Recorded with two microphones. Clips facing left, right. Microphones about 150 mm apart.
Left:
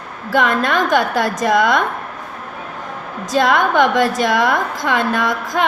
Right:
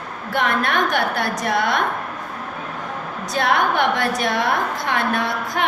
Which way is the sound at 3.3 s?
90° left.